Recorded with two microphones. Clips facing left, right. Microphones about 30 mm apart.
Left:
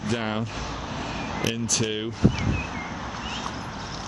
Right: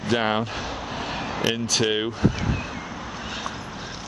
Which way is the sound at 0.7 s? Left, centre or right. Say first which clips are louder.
Right 2 dB; centre.